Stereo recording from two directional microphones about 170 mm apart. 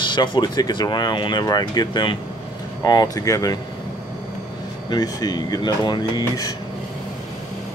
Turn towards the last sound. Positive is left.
turn(degrees=25)  # may be behind; listen again after turning